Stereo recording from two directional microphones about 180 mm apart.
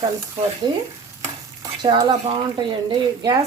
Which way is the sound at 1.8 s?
25° right (ahead or behind).